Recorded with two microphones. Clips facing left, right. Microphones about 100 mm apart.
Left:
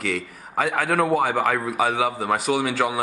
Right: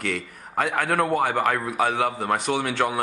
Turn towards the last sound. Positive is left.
turn(degrees=0)  # may be behind; listen again after turning